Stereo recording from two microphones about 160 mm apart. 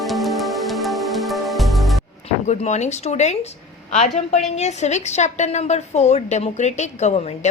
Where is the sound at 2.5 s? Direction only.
45° left (ahead or behind).